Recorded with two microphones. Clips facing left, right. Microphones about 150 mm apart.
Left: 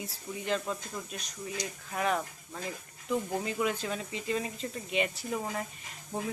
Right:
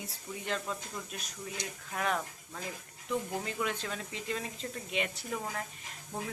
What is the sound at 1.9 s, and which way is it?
Speech, 5° left (ahead or behind).